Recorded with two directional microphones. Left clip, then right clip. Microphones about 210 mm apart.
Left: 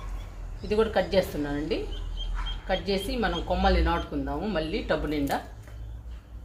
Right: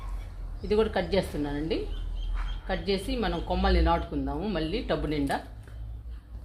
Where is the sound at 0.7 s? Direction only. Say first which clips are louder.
Left 1 dB; 35° right (ahead or behind).